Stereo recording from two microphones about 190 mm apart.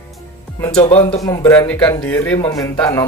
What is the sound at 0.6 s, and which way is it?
A man's voice, 10° left (ahead or behind).